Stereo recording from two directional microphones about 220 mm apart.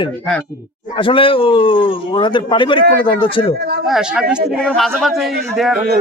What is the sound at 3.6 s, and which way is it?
Speech, 45° right (ahead or behind).